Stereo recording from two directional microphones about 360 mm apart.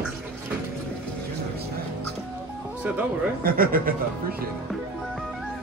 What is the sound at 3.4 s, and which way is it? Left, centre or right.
Speech, right.